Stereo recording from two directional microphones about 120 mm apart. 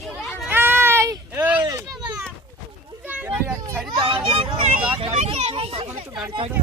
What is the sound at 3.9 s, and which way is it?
Vehicle, 45° right (ahead or behind).